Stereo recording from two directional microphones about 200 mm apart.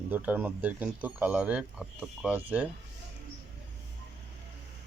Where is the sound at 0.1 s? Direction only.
10° right (ahead or behind).